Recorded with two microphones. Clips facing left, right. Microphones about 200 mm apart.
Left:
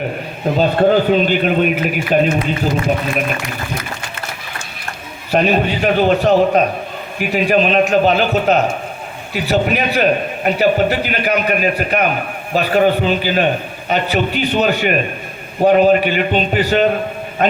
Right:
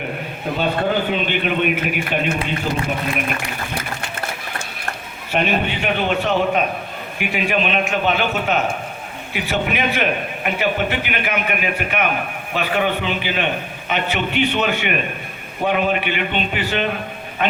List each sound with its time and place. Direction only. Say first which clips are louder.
0.5 s a man's voice: left 7 dB; 40° left (ahead or behind)
5.3 s a man's voice: left 5 dB; 40° left (ahead or behind)